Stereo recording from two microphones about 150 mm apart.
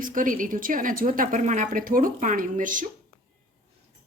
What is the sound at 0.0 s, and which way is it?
A woman's voice, 60° right (ahead or behind).